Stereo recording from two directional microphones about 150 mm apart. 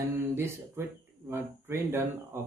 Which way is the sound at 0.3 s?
15° right (ahead or behind).